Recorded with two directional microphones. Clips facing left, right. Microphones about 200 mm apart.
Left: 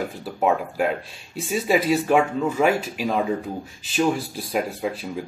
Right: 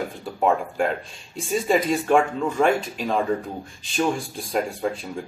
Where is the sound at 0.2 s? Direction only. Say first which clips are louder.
Even; 5° left (ahead or behind).